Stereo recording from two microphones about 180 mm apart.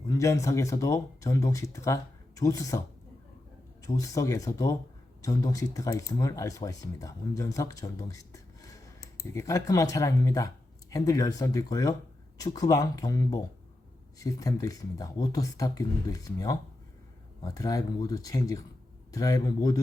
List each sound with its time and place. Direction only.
0.1 s speech: 15° left (ahead or behind)
3.8 s speech: 20° left (ahead or behind)